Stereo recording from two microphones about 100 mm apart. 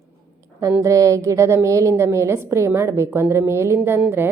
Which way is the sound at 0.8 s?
30° right (ahead or behind).